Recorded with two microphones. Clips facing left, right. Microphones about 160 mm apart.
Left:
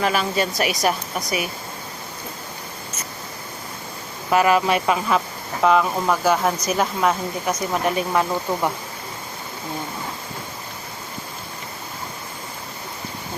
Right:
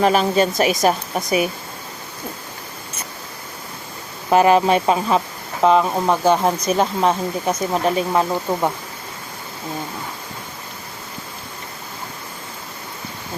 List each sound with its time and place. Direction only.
0.0 s a woman's voice: 35° right (ahead or behind)
4.3 s speech: 35° right (ahead or behind)